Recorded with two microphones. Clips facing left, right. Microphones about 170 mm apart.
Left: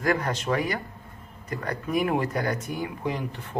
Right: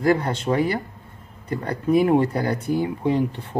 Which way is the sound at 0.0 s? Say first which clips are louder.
Right 5 dB; 30° right (ahead or behind).